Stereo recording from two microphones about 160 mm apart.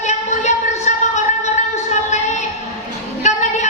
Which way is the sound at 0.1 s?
45° left (ahead or behind).